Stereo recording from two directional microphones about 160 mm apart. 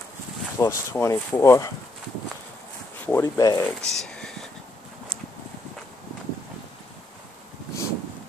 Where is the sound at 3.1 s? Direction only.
20° left (ahead or behind).